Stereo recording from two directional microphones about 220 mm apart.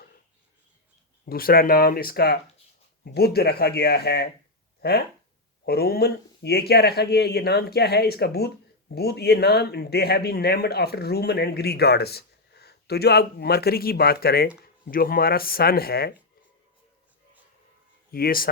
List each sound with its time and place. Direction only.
1.2 s speech: 40° left (ahead or behind)
18.1 s speech: 40° left (ahead or behind)